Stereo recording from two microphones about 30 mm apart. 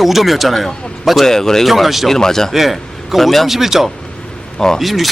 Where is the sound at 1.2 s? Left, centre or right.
Centre.